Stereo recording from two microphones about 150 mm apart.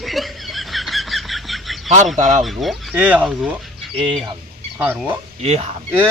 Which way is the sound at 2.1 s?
55° right (ahead or behind).